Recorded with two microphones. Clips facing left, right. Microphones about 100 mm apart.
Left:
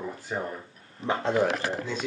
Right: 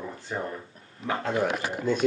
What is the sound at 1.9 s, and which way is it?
Speech, 50° right (ahead or behind).